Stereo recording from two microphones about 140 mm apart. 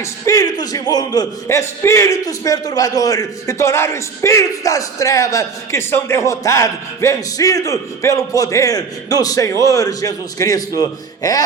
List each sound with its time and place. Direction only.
0.0 s a man's voice: 25° left (ahead or behind)